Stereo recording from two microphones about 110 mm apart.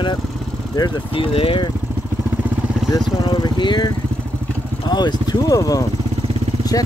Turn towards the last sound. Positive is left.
turn(degrees=35)  # may be behind; listen again after turning